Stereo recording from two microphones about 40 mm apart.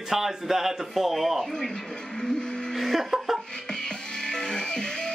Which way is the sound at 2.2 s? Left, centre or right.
Centre.